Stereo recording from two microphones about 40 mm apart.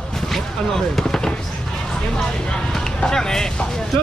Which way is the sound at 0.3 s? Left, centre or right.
Centre.